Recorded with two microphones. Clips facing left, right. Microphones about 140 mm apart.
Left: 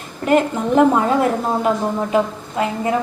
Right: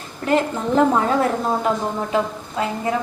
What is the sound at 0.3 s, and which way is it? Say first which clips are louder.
A woman's voice: left 3 dB; 15° left (ahead or behind).